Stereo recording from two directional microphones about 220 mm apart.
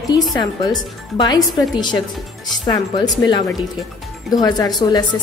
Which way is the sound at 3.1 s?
15° left (ahead or behind).